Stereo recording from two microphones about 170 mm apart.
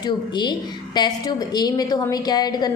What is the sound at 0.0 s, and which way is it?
A woman's voice, 25° left (ahead or behind).